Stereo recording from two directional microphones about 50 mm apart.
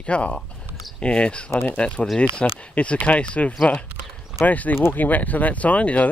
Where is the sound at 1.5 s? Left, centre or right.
Left.